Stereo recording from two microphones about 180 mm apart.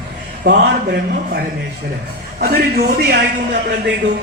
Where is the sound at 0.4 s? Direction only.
65° right (ahead or behind).